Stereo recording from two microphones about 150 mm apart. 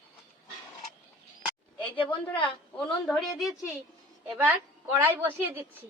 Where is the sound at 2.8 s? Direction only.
Centre (ahead or behind).